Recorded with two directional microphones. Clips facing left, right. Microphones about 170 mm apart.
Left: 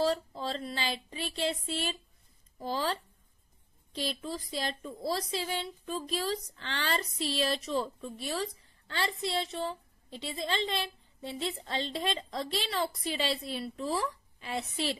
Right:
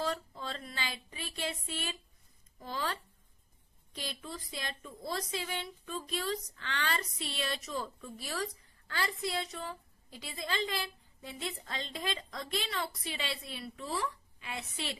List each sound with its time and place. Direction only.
0.0 s a woman's voice: 30° left (ahead or behind)